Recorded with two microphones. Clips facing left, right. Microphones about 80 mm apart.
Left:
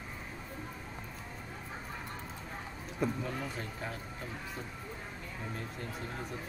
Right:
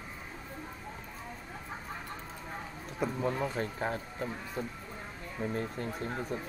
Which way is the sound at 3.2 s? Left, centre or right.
Right.